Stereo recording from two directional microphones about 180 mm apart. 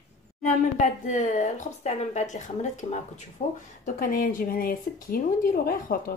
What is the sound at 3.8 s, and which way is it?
Speech, 50° left (ahead or behind).